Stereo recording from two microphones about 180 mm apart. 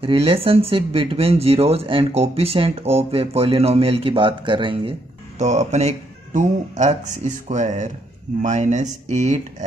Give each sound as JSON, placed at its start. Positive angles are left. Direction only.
{"t": 0.0, "sound": "speech", "side_deg": -30}
{"t": 5.4, "sound": "speech", "side_deg": -40}